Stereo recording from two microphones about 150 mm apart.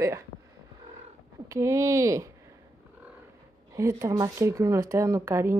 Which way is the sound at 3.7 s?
20° right (ahead or behind).